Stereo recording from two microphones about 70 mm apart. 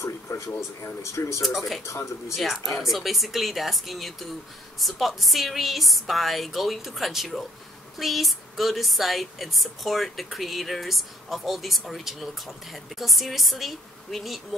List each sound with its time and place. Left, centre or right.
0.0 s speech: left
1.4 s a woman's voice: centre
1.9 s speech: left
2.3 s a woman's voice: centre